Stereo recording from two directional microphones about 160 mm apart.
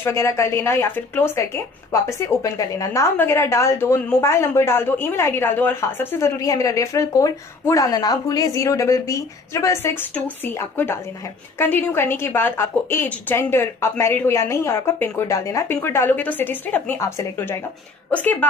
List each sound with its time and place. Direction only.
0.0 s a woman's voice: 15° left (ahead or behind)